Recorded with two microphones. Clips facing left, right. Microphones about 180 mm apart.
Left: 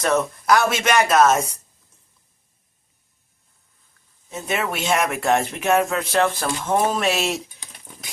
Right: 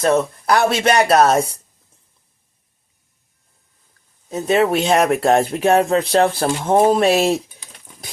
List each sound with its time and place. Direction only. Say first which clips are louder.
0.0 s speech: right 4 dB; 30° right (ahead or behind)
4.3 s speech: right 9 dB; 35° right (ahead or behind)